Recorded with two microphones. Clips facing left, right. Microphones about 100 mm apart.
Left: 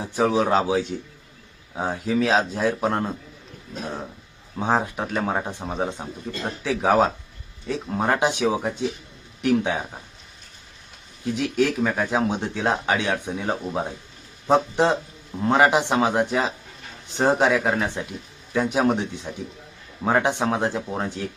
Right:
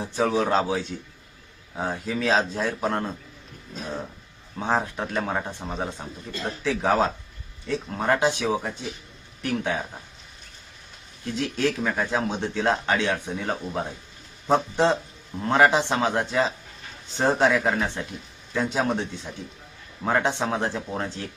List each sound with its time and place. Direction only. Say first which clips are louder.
0.0 s speech: left 2 dB; 15° left (ahead or behind)
4.5 s speech: left 2 dB; 15° left (ahead or behind)
11.3 s speech: left 3 dB; 15° left (ahead or behind)